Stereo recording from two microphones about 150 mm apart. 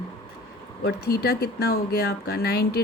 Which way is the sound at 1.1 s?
90° left.